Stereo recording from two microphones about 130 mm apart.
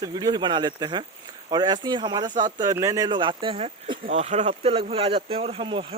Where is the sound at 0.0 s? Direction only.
30° right (ahead or behind); by 3.9 s 45° right (ahead or behind).